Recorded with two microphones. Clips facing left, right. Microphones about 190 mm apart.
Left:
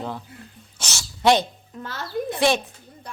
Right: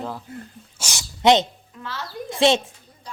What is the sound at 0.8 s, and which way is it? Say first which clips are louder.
Sneeze: right 1 dB; 15° right (ahead or behind).